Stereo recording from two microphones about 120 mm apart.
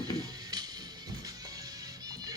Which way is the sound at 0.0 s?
35° right (ahead or behind).